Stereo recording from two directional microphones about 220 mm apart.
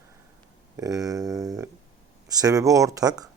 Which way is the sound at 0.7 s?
15° right (ahead or behind).